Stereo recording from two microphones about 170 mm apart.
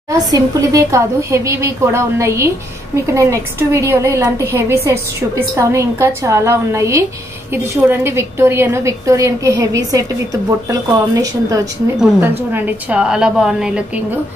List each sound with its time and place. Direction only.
0.3 s a woman's voice: 20° right (ahead or behind)
12.5 s a woman's voice: 10° right (ahead or behind)